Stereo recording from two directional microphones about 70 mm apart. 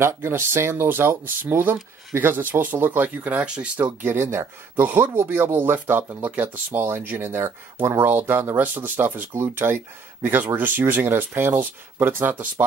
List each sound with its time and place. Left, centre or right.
0.0 s speech: right; by 3.9 s centre
4.0 s speech: right